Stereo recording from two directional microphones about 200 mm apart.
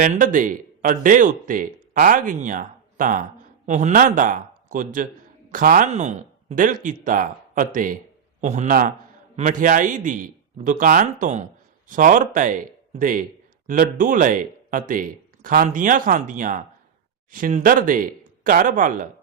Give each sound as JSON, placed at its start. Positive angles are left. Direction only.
{"t": 0.0, "sound": "speech", "side_deg": -40}